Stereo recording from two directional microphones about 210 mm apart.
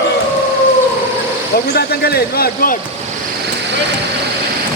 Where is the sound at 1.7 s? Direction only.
50° left (ahead or behind).